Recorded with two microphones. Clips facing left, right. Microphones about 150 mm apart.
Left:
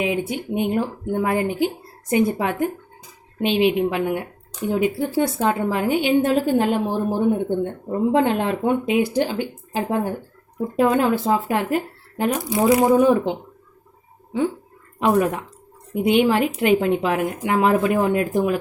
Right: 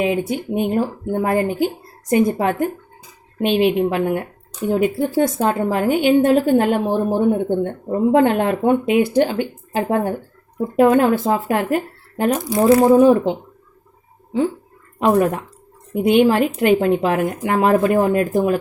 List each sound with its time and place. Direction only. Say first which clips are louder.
0.0 s speech: right 3 dB; 45° right (ahead or behind)
12.9 s speech: right 4 dB; 35° right (ahead or behind)
14.9 s speech: right 3 dB; 45° right (ahead or behind)